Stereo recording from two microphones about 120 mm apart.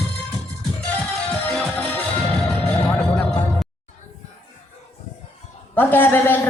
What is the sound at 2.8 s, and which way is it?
Music, 10° left (ahead or behind).